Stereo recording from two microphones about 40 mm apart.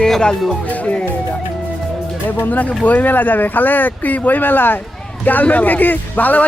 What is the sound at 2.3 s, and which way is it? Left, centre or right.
Speech, left.